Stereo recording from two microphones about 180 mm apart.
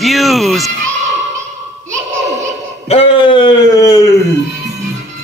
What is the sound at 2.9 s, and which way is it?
Speech, 25° left (ahead or behind).